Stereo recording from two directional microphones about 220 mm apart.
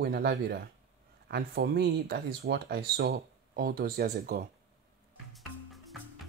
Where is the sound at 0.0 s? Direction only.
45° right (ahead or behind).